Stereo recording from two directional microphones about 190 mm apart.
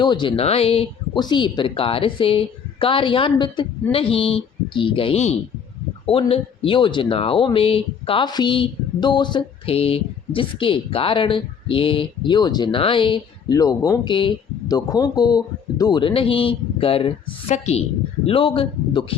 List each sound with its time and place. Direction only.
0.0 s a woman's voice: 25° left (ahead or behind)